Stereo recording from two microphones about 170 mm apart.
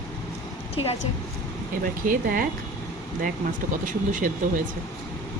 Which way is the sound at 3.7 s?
50° right (ahead or behind).